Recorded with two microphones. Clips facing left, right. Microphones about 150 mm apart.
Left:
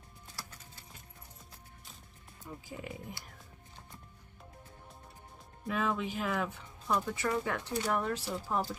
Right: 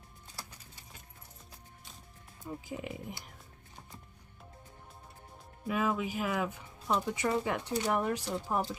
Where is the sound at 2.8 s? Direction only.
20° right (ahead or behind).